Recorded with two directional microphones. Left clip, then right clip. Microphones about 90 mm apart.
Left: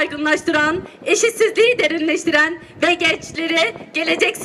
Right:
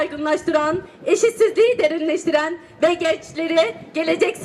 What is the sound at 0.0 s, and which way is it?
A woman's voice, 30° left (ahead or behind).